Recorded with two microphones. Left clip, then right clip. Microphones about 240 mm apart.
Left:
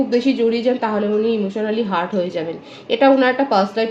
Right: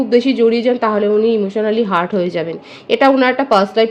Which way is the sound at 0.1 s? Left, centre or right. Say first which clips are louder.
Right 9 dB; right.